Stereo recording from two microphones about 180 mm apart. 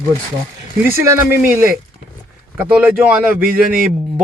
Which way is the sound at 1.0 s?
15° right (ahead or behind).